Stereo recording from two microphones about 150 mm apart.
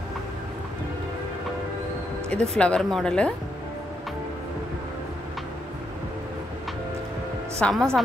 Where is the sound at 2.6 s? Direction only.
5° left (ahead or behind).